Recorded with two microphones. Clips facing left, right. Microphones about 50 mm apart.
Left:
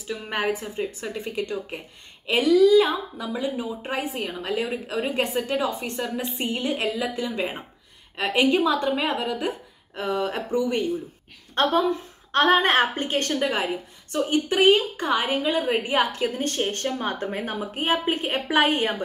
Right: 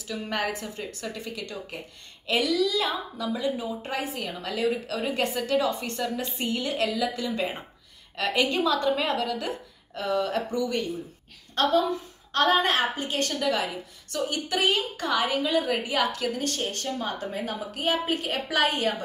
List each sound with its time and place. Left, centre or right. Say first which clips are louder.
0.0 s a woman's voice: left 3 dB; centre
7.2 s a woman's voice: left 1 dB; centre
11.5 s a woman's voice: left 2 dB; left